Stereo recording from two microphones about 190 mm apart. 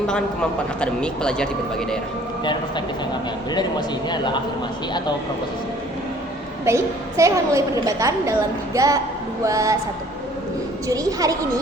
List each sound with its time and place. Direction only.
0.8 s speech: 5° left (ahead or behind)
2.4 s a man's voice: 25° left (ahead or behind)
6.7 s a woman's voice: 15° right (ahead or behind)
10.8 s speech: 20° right (ahead or behind)